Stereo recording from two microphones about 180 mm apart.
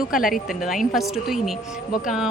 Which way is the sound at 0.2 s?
50° left (ahead or behind).